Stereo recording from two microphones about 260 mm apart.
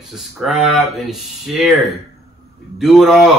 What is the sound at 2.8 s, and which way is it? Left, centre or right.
Speech, centre.